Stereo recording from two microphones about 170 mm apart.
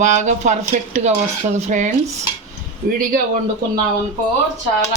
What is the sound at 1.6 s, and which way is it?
Speech, 45° right (ahead or behind).